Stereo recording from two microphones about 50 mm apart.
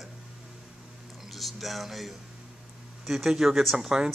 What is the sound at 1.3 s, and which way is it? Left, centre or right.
A man's voice, centre.